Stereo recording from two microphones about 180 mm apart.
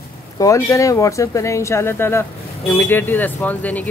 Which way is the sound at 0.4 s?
15° left (ahead or behind).